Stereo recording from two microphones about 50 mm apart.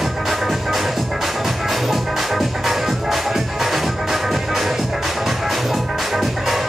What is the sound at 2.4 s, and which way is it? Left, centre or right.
Music, centre.